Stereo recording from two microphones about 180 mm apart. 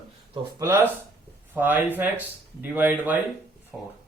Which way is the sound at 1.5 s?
10° right (ahead or behind).